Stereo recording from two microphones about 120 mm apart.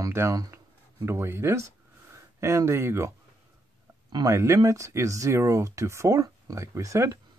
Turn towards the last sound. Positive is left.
turn(degrees=-25)  # may be behind; listen again after turning